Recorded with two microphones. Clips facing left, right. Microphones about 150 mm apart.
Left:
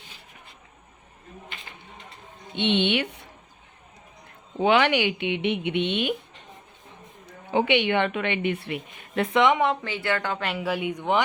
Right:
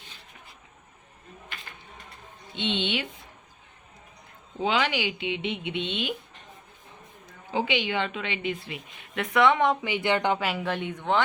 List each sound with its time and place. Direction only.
2.6 s a woman's voice: 60° left (ahead or behind)
4.6 s a woman's voice: 65° left (ahead or behind)
7.3 s a woman's voice: 65° left (ahead or behind)
9.1 s a woman's voice: 30° left (ahead or behind)
9.8 s speech: 15° right (ahead or behind)
10.4 s speech: centre (ahead or behind)